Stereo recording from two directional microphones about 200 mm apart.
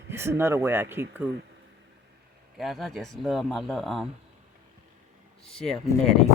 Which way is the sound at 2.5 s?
Centre (ahead or behind).